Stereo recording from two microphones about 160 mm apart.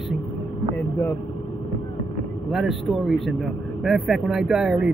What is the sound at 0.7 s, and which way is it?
Speech, 20° left (ahead or behind).